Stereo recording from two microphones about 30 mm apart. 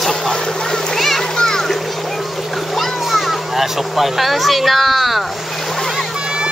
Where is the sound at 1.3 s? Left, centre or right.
Left.